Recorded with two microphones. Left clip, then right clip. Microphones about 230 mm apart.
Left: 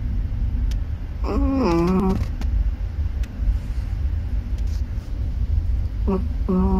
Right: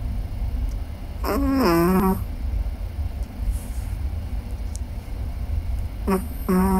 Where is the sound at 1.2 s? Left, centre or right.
Right.